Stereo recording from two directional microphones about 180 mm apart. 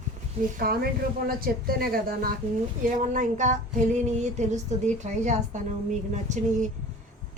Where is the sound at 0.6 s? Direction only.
55° right (ahead or behind).